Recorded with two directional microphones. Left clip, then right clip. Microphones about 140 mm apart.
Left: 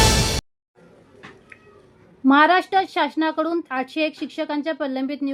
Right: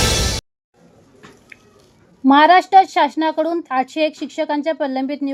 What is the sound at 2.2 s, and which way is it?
A woman's voice, 25° right (ahead or behind).